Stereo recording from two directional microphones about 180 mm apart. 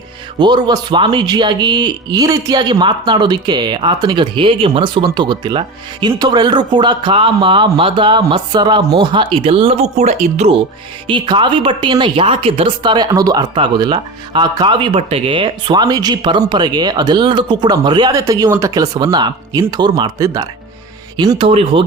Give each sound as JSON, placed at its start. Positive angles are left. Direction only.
{"t": 0.3, "sound": "speech", "side_deg": -25}